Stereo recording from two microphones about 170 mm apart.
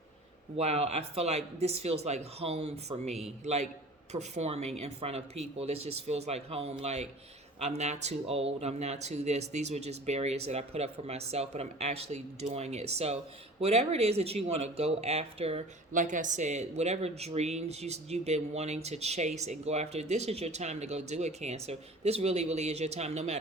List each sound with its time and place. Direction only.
0.5 s speech: 35° right (ahead or behind)
15.9 s speech: 50° right (ahead or behind)